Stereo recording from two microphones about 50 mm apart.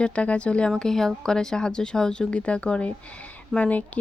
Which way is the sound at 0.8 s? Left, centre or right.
Centre.